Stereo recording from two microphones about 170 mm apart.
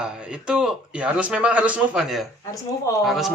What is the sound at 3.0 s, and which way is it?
Speech, centre (ahead or behind).